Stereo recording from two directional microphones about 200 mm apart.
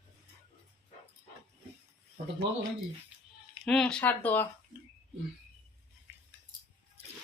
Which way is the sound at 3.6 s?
5° left (ahead or behind).